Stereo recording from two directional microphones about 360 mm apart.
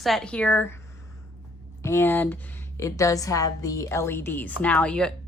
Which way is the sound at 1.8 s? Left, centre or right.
Centre.